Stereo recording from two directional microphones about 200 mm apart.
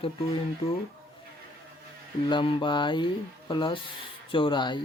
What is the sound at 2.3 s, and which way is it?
Speech, 25° left (ahead or behind).